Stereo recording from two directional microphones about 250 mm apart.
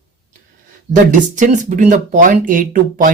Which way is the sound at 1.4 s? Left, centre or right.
Right.